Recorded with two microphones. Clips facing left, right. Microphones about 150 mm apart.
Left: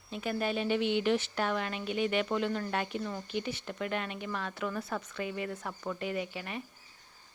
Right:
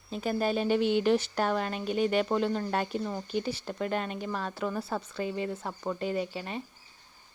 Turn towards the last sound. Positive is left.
turn(degrees=-30)  # may be behind; listen again after turning